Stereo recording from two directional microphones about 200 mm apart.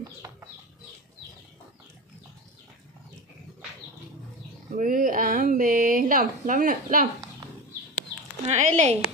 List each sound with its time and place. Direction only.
4.7 s speech: 40° right (ahead or behind)
8.5 s speech: 35° right (ahead or behind)